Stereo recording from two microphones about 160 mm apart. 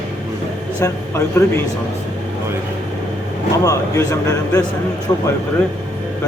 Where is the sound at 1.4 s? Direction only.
20° left (ahead or behind).